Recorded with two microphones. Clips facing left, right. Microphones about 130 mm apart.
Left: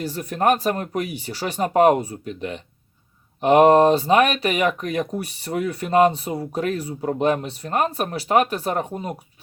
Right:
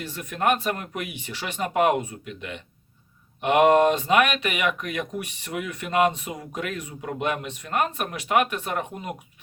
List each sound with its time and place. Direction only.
0.0 s speech: 40° left (ahead or behind)